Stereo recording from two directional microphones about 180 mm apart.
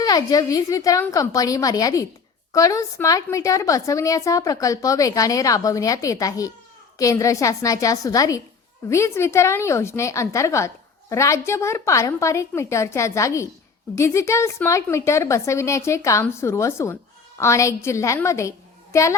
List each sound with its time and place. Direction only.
0.0 s a woman's voice: 20° left (ahead or behind)